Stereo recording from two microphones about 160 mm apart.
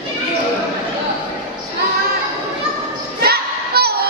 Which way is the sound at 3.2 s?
75° right (ahead or behind).